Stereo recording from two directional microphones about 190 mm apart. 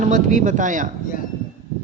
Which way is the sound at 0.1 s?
40° right (ahead or behind).